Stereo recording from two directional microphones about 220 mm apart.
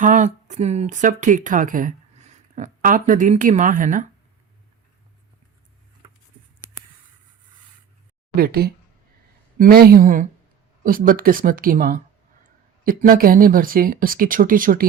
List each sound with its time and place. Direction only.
0.0 s speech: 35° right (ahead or behind)
8.4 s speech: 45° right (ahead or behind)